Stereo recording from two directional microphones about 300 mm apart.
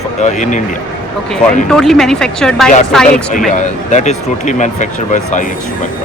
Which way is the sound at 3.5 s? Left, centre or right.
Left.